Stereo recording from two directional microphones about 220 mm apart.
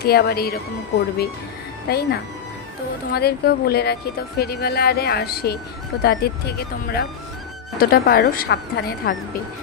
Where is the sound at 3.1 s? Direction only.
45° left (ahead or behind).